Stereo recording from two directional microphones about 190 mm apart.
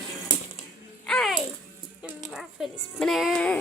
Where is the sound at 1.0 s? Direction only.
Centre (ahead or behind).